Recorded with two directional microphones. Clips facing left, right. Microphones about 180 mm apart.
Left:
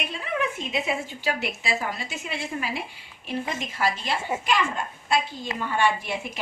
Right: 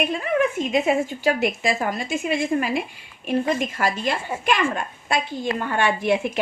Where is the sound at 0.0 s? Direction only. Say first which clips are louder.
Right 8 dB; 50° right (ahead or behind).